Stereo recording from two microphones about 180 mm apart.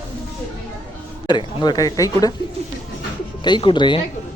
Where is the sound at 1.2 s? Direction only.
25° left (ahead or behind).